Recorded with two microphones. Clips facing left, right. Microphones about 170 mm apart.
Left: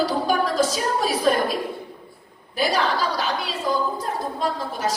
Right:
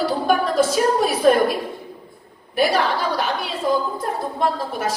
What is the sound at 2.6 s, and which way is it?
A woman's voice, 55° right (ahead or behind).